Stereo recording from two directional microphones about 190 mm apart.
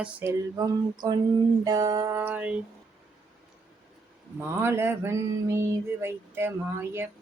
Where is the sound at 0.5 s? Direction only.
20° right (ahead or behind).